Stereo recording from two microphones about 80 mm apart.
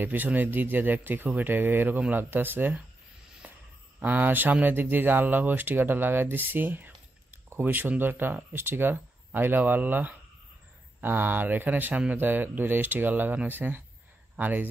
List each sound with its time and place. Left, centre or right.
0.0 s speech: right
3.4 s a sound: centre
4.0 s speech: right